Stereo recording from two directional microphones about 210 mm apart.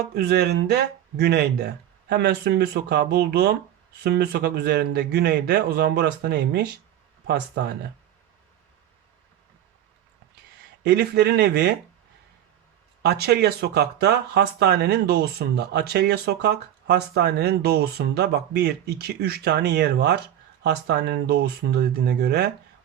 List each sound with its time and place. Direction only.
0.0 s speech: 50° right (ahead or behind)
10.8 s speech: 50° right (ahead or behind)
13.0 s speech: 50° right (ahead or behind)